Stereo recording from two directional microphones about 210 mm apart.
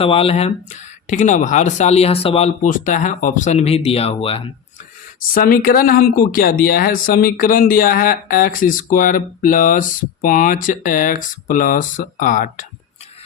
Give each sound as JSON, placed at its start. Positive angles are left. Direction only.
{"t": 0.0, "sound": "speech", "side_deg": 25}
{"t": 5.2, "sound": "speech", "side_deg": 40}